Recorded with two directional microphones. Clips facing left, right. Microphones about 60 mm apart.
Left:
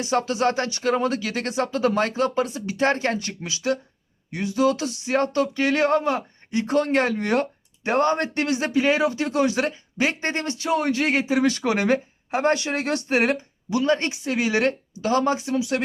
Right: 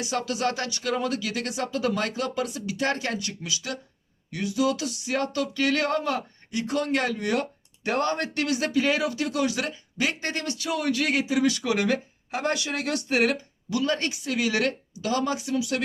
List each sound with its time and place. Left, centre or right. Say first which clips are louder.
0.0 s speech: left 5 dB; left